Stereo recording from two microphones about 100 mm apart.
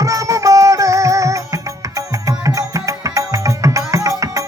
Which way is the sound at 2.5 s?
35° right (ahead or behind).